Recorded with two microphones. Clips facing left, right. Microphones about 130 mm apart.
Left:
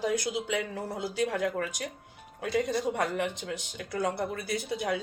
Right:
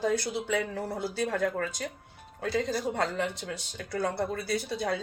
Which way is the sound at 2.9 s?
15° left (ahead or behind).